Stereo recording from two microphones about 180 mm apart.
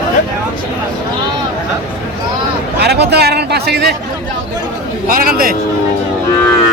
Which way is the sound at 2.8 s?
65° right (ahead or behind).